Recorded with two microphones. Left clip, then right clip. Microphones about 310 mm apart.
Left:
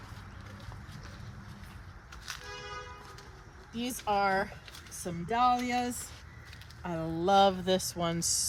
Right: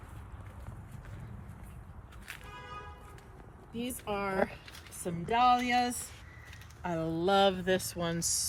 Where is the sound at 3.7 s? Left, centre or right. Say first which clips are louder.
Left 6 dB; centre.